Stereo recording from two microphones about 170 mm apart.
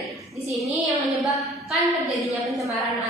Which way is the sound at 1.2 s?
Centre (ahead or behind).